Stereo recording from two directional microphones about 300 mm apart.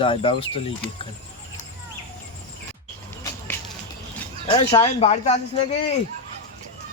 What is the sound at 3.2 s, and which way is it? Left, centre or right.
Whip, centre.